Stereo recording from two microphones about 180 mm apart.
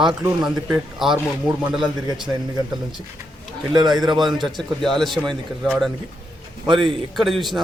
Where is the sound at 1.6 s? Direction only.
25° right (ahead or behind).